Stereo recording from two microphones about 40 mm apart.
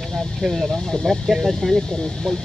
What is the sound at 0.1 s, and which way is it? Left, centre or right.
Speech, centre.